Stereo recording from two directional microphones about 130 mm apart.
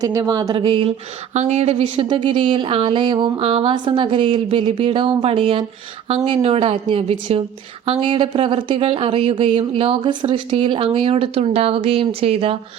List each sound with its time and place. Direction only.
0.0 s speech: 25° right (ahead or behind); by 0.9 s 45° right (ahead or behind)
1.3 s speech: 60° right (ahead or behind)
2.0 s speech: 40° right (ahead or behind)